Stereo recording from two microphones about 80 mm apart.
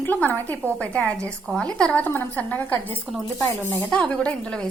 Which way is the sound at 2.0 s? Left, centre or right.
Left.